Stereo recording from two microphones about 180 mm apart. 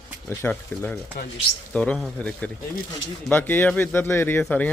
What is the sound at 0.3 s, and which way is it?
Speech, 10° left (ahead or behind).